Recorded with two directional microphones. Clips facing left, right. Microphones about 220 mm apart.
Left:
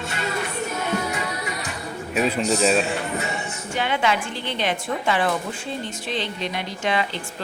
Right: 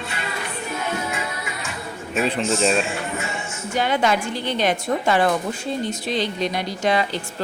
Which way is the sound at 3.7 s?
40° right (ahead or behind).